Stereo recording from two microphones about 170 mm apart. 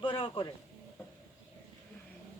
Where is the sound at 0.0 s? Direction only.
30° left (ahead or behind).